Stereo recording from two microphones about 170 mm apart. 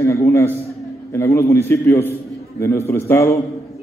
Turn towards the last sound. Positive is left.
turn(degrees=15)  # may be behind; listen again after turning